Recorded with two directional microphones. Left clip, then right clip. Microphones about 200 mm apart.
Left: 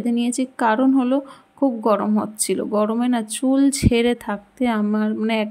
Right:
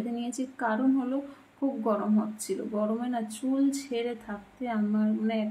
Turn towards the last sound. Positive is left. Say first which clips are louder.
# left 8 dB
turn(degrees=50)  # may be behind; listen again after turning